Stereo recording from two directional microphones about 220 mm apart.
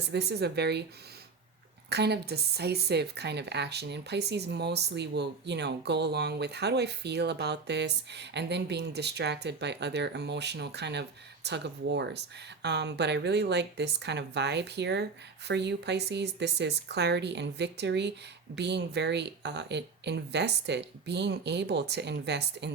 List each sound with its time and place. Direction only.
0.1 s speech: 50° right (ahead or behind)
1.9 s speech: 50° right (ahead or behind)